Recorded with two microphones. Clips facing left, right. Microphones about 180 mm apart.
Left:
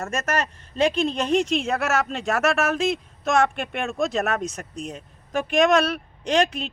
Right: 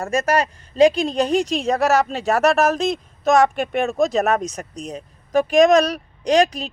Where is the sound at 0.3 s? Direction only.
35° right (ahead or behind).